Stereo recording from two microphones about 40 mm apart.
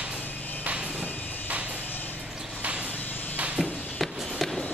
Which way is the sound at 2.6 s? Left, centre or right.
Right.